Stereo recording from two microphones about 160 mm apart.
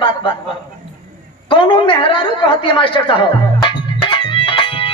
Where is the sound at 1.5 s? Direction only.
30° left (ahead or behind).